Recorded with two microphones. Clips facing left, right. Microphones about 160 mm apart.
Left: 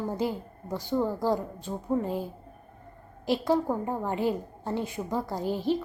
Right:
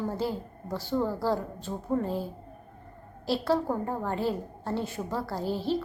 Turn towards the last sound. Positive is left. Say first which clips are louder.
# left 1 dB
turn(degrees=15)  # may be behind; listen again after turning